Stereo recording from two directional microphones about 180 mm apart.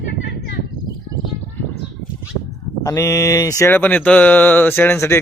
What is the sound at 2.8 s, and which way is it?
Speech, 15° left (ahead or behind).